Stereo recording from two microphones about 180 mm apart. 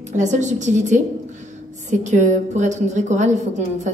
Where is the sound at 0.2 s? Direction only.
40° right (ahead or behind).